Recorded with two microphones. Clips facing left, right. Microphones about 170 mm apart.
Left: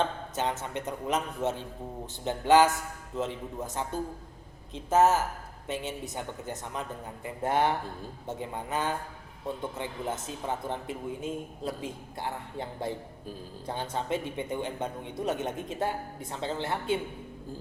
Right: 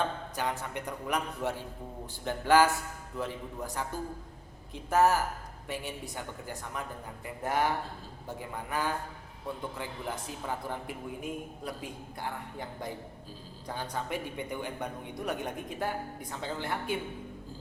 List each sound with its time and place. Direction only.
0.3 s a man's voice: 20° left (ahead or behind)